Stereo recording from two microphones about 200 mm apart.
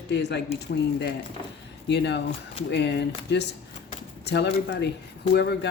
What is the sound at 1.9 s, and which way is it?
Speech, 60° left (ahead or behind).